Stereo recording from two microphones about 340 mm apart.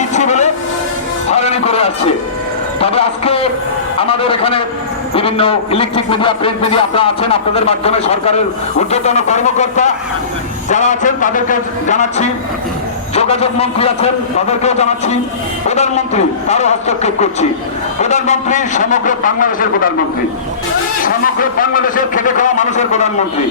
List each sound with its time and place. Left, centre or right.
0.1 s train: centre
1.3 s a man's voice: centre
21.0 s a man's voice: left